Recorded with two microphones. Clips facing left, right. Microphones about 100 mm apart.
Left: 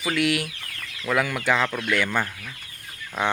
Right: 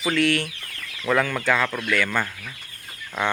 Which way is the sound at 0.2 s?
15° left (ahead or behind).